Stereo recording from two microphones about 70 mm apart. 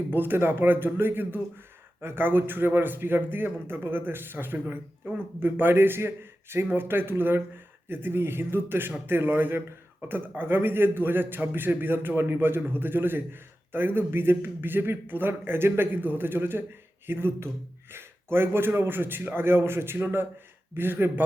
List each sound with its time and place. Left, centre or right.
0.1 s a man's voice: right